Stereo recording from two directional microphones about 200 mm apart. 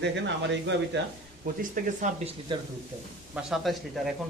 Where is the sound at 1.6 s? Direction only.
40° right (ahead or behind).